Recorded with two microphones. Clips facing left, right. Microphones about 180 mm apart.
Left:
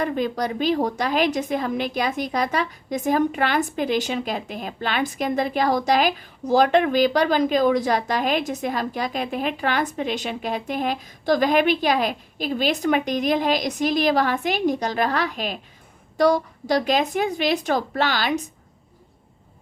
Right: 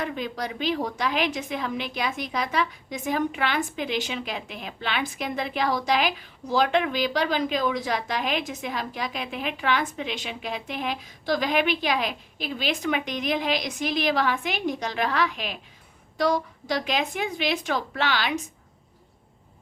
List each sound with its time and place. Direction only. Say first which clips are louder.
0.0 s a woman's voice: left 6 dB; 45° left (ahead or behind)